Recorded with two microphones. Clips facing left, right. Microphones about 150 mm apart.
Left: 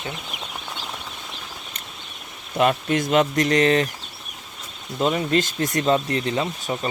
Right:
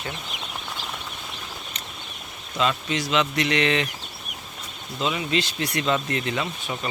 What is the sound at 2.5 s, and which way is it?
Speech, 55° left (ahead or behind).